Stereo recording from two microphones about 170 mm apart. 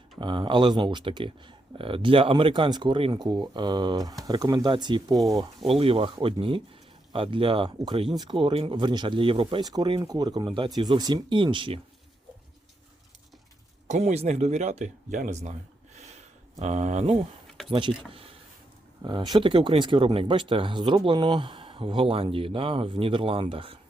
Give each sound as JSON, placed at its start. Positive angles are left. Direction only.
{"t": 0.2, "sound": "speech", "side_deg": -30}
{"t": 13.8, "sound": "speech", "side_deg": -40}
{"t": 16.0, "sound": "a sound", "side_deg": -40}
{"t": 17.7, "sound": "speech", "side_deg": -30}